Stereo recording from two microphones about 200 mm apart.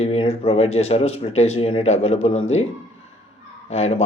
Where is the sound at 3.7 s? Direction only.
30° left (ahead or behind).